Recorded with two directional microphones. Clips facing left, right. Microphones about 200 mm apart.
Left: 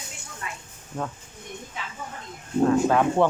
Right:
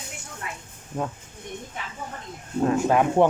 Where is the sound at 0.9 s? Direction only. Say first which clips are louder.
Right 2 dB; 10° right (ahead or behind).